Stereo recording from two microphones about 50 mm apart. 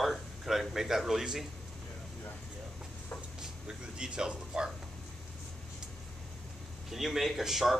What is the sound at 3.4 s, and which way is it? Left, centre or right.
Speech, centre.